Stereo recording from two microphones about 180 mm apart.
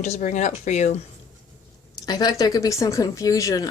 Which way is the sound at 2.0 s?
20° left (ahead or behind).